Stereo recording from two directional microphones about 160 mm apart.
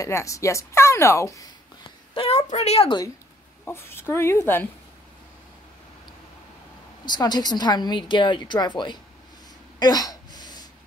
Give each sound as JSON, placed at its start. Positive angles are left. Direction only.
{"t": 0.0, "sound": "a woman's voice", "side_deg": 20}
{"t": 2.1, "sound": "a woman's voice", "side_deg": 40}
{"t": 3.6, "sound": "speech", "side_deg": 15}
{"t": 7.1, "sound": "a woman's voice", "side_deg": 25}
{"t": 9.8, "sound": "a sound", "side_deg": 25}